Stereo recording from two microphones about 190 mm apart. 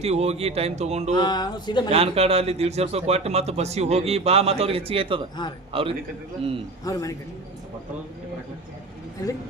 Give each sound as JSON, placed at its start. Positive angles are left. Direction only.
{"t": 0.0, "sound": "a man's voice", "side_deg": -35}
{"t": 1.1, "sound": "speech", "side_deg": 20}
{"t": 1.9, "sound": "a man's voice", "side_deg": -30}
{"t": 6.8, "sound": "speech", "side_deg": 20}